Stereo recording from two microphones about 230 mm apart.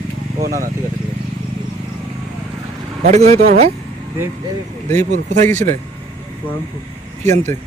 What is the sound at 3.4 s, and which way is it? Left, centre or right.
Speech, right.